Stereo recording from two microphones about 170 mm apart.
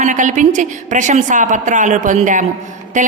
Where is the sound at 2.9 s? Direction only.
45° right (ahead or behind).